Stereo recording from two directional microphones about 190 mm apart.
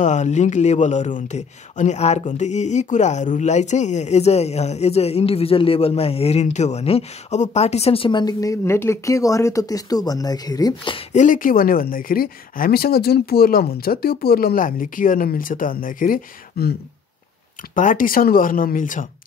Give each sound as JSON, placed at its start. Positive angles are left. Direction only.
{"t": 0.0, "sound": "speech", "side_deg": 40}
{"t": 11.1, "sound": "speech", "side_deg": 45}
{"t": 17.7, "sound": "speech", "side_deg": 45}